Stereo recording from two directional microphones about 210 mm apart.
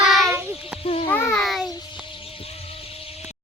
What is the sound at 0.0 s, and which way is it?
Child singing, centre (ahead or behind).